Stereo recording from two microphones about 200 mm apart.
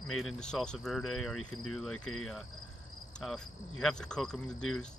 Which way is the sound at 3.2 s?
Centre (ahead or behind).